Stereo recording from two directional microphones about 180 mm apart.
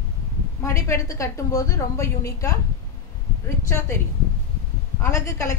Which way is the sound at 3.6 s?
15° left (ahead or behind).